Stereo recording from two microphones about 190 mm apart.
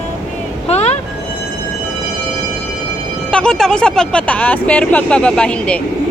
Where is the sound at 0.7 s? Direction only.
35° left (ahead or behind).